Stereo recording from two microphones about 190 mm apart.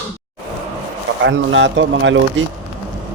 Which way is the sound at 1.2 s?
75° right (ahead or behind).